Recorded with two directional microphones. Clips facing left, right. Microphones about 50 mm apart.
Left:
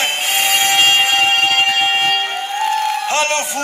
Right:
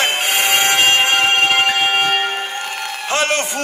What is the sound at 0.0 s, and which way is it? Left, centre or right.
Music, right.